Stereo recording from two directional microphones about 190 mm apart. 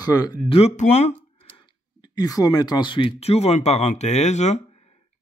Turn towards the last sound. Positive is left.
turn(degrees=35)  # may be behind; listen again after turning